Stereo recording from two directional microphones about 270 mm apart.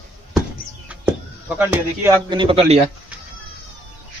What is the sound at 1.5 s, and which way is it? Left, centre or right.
Speech, centre.